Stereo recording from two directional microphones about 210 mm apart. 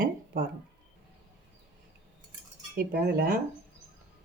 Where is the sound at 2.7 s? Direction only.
45° right (ahead or behind).